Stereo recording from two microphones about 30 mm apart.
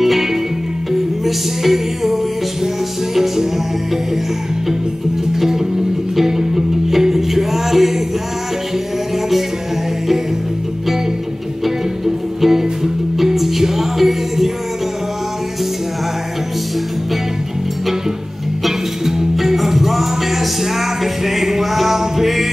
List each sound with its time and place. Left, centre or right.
0.0 s music: centre
6.1 s music: centre
12.4 s music: centre
19.3 s music: centre